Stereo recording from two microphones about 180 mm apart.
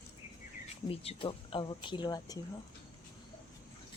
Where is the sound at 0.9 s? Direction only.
30° left (ahead or behind).